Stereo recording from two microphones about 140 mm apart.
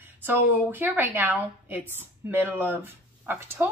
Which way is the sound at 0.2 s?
15° right (ahead or behind).